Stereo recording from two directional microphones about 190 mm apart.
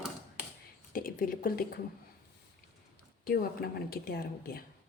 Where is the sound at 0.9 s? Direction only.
50° left (ahead or behind).